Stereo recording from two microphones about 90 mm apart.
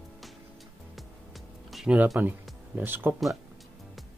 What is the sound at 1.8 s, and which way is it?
Speech, 15° right (ahead or behind).